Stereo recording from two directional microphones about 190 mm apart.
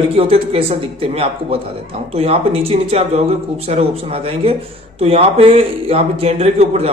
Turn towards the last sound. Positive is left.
turn(degrees=-35)  # may be behind; listen again after turning